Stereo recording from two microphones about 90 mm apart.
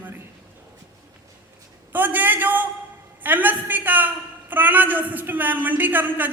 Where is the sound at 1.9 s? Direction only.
20° right (ahead or behind).